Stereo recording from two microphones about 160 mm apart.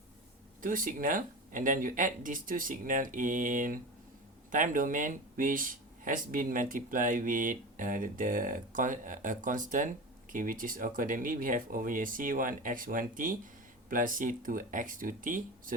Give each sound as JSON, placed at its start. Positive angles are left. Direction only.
{"t": 0.6, "sound": "speech", "side_deg": -60}